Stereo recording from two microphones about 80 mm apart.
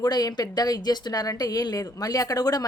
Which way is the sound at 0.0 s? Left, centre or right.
Left.